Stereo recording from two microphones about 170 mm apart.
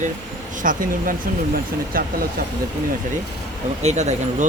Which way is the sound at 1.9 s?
55° right (ahead or behind).